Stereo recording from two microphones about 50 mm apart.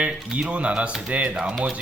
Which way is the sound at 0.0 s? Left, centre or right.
Centre.